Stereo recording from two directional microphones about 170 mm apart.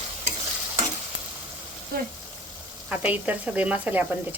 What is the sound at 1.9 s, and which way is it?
Speech, 60° right (ahead or behind).